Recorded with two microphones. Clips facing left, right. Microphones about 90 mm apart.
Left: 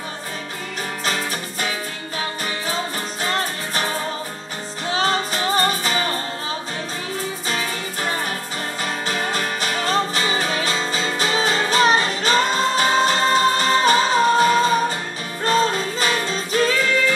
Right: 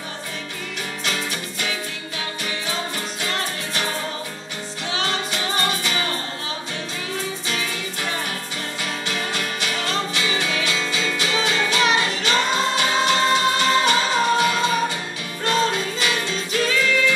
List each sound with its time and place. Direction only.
1.0 s music: 40° left (ahead or behind)
4.8 s music: 40° left (ahead or behind)
7.4 s music: 40° left (ahead or behind)